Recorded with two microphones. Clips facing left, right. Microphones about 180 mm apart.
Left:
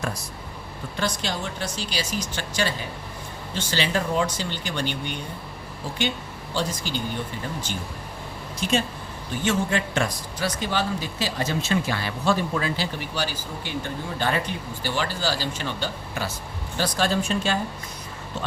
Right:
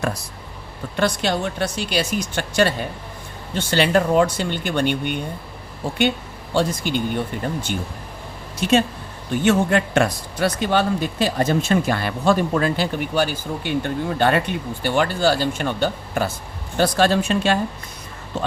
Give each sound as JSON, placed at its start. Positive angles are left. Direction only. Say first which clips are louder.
{"t": 0.9, "sound": "a man's voice", "louder": "right 7 dB", "side_deg": -60}
{"t": 9.4, "sound": "a man's voice", "louder": "right 6 dB", "side_deg": -60}